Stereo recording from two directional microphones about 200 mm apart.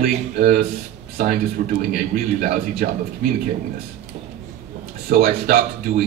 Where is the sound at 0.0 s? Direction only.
50° right (ahead or behind).